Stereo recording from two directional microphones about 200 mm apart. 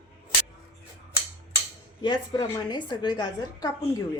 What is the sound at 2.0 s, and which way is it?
A woman's voice, 25° left (ahead or behind).